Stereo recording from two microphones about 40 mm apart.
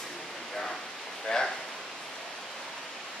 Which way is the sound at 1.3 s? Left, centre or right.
Centre.